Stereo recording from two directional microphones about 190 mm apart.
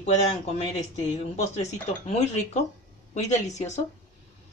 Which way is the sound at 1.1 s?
35° left (ahead or behind).